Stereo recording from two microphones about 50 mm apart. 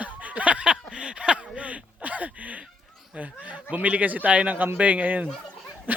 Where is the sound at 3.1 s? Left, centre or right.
Right.